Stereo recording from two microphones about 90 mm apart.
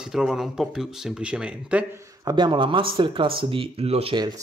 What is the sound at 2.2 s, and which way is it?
A man's voice, 55° right (ahead or behind).